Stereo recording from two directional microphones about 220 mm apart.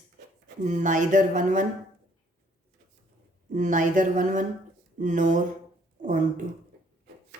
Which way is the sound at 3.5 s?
35° right (ahead or behind).